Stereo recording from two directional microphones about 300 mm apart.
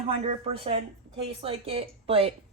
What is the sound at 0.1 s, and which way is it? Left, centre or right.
Speech, centre.